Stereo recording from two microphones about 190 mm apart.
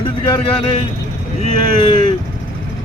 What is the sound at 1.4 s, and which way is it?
Speech, 25° left (ahead or behind).